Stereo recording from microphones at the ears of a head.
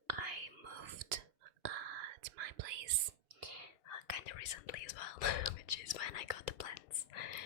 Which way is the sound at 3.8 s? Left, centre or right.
Left.